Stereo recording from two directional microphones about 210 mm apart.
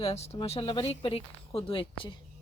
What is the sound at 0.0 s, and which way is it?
Speech, 30° left (ahead or behind).